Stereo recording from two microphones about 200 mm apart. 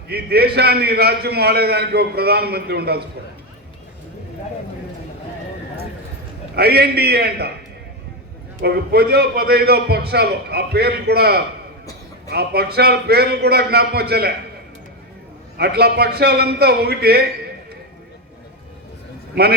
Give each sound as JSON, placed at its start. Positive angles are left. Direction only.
{"t": 0.1, "sound": "a man's voice", "side_deg": -55}
{"t": 6.6, "sound": "a man's voice", "side_deg": -50}
{"t": 8.6, "sound": "a man's voice", "side_deg": -50}
{"t": 15.5, "sound": "a man's voice", "side_deg": -55}
{"t": 19.3, "sound": "a man's voice", "side_deg": -55}